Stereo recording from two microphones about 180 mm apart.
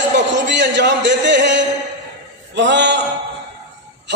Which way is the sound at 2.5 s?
75° right (ahead or behind).